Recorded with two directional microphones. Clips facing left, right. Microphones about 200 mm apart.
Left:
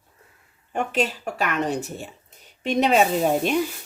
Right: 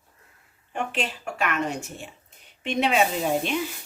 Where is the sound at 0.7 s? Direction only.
40° left (ahead or behind).